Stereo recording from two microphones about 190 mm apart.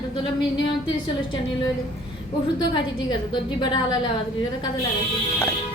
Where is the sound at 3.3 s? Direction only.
25° left (ahead or behind).